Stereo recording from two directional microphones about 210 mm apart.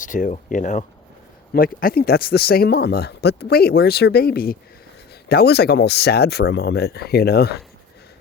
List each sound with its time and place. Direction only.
0.0 s speech: 40° left (ahead or behind)